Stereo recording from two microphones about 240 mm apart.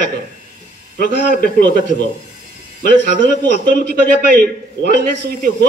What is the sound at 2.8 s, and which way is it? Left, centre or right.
A man's voice, right.